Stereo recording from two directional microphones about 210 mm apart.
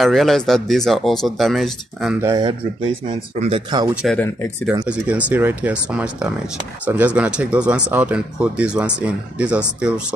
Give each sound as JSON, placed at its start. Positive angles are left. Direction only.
{"t": 0.0, "sound": "speech", "side_deg": 0}
{"t": 2.2, "sound": "speech", "side_deg": -20}
{"t": 3.9, "sound": "speech", "side_deg": -5}